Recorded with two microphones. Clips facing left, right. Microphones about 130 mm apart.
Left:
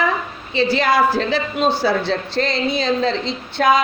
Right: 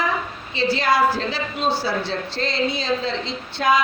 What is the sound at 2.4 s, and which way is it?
Speech, 75° left (ahead or behind).